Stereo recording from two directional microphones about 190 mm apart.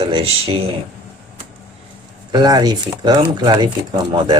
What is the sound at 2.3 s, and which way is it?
Speech, 20° right (ahead or behind).